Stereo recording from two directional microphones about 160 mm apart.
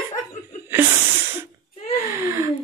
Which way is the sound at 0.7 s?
15° right (ahead or behind).